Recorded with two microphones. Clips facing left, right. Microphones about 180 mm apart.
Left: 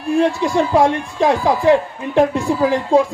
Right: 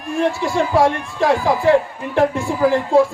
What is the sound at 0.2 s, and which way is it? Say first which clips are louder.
A man's voice: left 1 dB; 15° left (ahead or behind).